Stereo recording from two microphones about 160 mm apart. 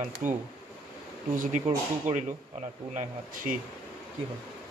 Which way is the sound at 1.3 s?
55° right (ahead or behind).